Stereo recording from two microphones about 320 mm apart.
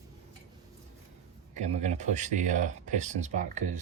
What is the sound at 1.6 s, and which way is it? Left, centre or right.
Speech, right.